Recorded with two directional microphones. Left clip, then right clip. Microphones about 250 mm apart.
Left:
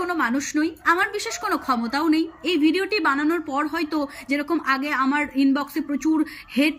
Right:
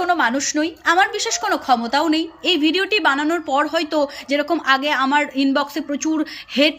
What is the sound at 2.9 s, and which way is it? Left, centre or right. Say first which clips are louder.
Speech: right 4 dB; centre.